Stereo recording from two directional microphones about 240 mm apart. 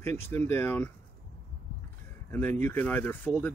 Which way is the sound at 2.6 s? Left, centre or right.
Centre.